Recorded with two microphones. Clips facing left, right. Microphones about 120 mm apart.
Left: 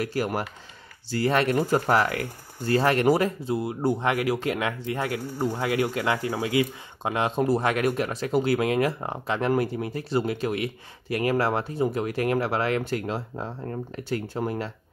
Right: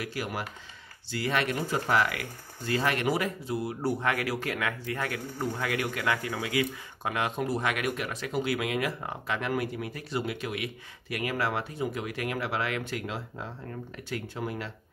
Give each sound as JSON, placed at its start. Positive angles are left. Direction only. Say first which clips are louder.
{"t": 0.0, "sound": "speech", "louder": "left 7 dB", "side_deg": 40}
{"t": 3.5, "sound": "speech", "louder": "left 3 dB", "side_deg": 20}